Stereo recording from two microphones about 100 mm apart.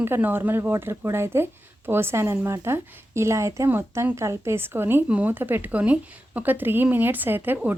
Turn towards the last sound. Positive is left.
turn(degrees=-20)  # may be behind; listen again after turning